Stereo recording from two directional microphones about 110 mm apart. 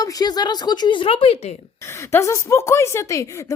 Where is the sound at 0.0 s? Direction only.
35° left (ahead or behind); by 1.5 s 70° left (ahead or behind).